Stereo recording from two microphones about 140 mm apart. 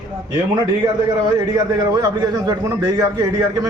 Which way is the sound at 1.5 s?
25° right (ahead or behind).